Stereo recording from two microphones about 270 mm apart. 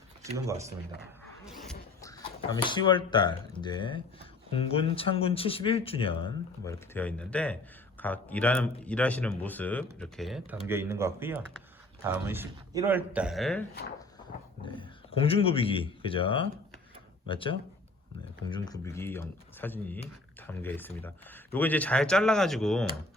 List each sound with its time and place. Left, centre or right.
0.3 s speech: centre
2.0 s speech: centre
6.7 s speech: centre
14.6 s speech: centre